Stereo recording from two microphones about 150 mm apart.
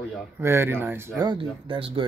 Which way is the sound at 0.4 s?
15° right (ahead or behind).